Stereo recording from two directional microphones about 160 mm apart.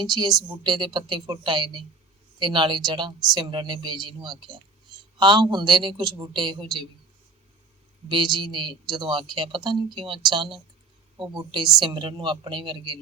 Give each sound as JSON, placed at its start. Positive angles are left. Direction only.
{"t": 0.0, "sound": "speech", "side_deg": -25}
{"t": 8.1, "sound": "speech", "side_deg": -30}